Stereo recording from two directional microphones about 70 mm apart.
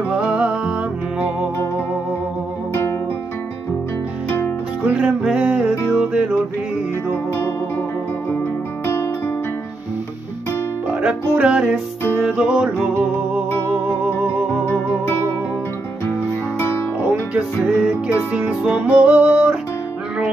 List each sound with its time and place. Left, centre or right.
0.1 s music: centre
4.8 s music: centre
8.8 s guitar: left
11.0 s music: centre
16.5 s music: left
17.1 s music: centre